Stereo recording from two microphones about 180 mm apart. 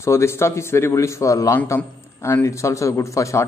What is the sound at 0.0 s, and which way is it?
A man's voice, 15° left (ahead or behind).